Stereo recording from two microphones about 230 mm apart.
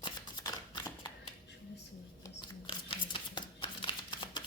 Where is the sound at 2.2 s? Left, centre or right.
Left.